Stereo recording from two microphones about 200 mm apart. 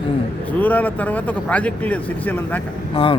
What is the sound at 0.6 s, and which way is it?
Speech, 10° left (ahead or behind).